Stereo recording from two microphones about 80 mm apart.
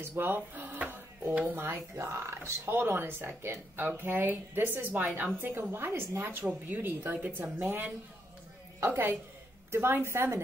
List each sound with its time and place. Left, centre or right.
0.0 s drawer open or close: right
1.6 s speech: right
8.7 s a woman's voice: right